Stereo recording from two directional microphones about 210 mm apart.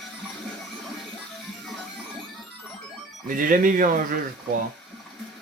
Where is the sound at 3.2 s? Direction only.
40° right (ahead or behind).